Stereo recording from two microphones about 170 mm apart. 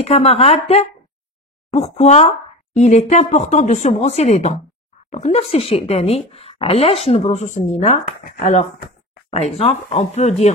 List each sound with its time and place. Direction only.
0.0 s speech: 35° left (ahead or behind)
2.0 s a woman's voice: 40° left (ahead or behind)